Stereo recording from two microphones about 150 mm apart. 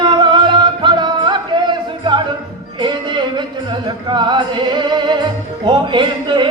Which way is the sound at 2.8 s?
30° right (ahead or behind).